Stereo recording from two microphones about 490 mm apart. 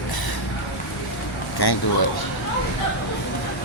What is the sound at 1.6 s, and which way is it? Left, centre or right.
Speech, left.